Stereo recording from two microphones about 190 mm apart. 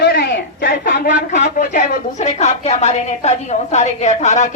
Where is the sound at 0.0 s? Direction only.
60° left (ahead or behind).